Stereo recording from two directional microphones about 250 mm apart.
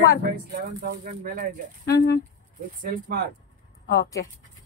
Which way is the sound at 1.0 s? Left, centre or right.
Right.